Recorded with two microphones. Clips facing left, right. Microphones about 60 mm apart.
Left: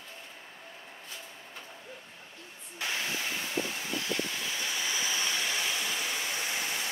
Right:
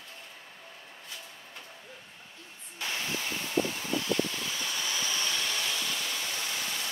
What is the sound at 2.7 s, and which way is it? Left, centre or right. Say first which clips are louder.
Spray: left 1 dB; centre.